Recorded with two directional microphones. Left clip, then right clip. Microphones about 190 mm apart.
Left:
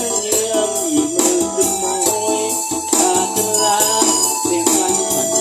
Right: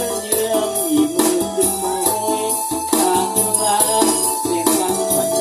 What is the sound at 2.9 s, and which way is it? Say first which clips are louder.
Music: left 1 dB; 40° left (ahead or behind).